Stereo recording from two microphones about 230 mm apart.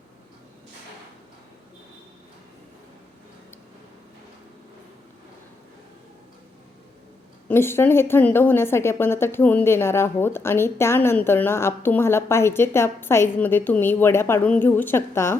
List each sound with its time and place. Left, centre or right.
7.4 s a woman's voice: centre